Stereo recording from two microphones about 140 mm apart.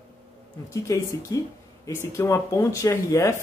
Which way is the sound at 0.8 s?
20° left (ahead or behind).